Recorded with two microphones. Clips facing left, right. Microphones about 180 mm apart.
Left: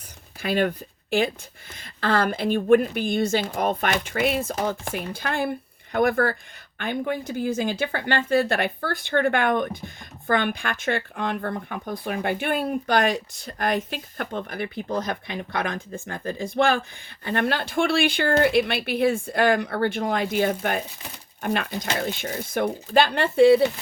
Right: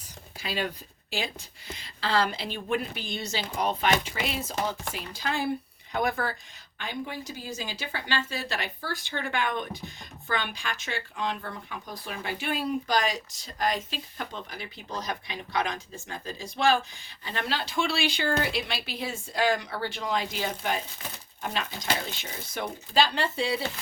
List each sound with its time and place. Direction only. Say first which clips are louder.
0.3 s speech: left 9 dB; 55° left (ahead or behind)